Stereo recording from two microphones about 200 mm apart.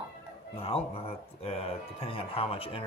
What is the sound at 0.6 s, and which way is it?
Speech, 30° left (ahead or behind).